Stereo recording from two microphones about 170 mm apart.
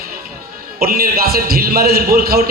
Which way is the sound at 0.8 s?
60° right (ahead or behind).